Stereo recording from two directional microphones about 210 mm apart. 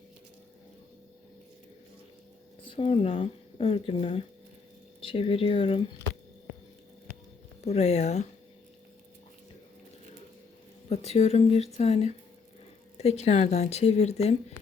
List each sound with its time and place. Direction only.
2.6 s speech: 25° left (ahead or behind)
7.6 s a woman's voice: 30° left (ahead or behind)
10.8 s a woman's voice: 30° left (ahead or behind)